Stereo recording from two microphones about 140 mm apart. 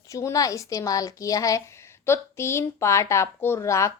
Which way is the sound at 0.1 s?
20° left (ahead or behind).